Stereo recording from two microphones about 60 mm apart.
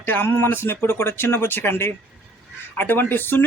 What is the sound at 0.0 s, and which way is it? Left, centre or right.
A man's voice, left.